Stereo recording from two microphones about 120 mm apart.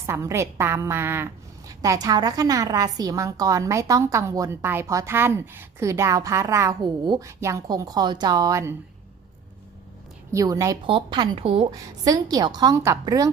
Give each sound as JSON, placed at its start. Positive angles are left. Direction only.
{"t": 0.0, "sound": "a woman's voice", "side_deg": -25}
{"t": 7.3, "sound": "a woman's voice", "side_deg": -25}
{"t": 10.3, "sound": "a woman's voice", "side_deg": -25}
{"t": 10.8, "sound": "a woman's voice", "side_deg": -45}
{"t": 11.7, "sound": "a woman's voice", "side_deg": -30}